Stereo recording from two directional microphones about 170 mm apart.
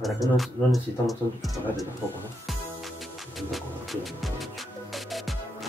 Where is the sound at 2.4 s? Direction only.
Centre (ahead or behind).